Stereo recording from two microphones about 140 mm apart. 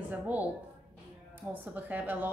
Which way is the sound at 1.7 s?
10° right (ahead or behind).